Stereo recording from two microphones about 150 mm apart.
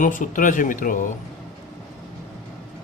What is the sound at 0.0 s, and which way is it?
Speech, 60° left (ahead or behind).